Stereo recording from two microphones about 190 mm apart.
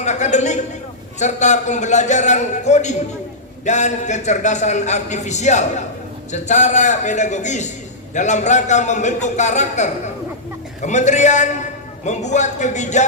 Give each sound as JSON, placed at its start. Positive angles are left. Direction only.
{"t": 0.0, "sound": "a man's voice", "side_deg": 40}